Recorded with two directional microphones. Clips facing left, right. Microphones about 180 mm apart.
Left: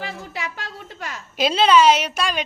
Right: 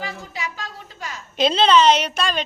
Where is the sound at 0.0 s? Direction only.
60° left (ahead or behind).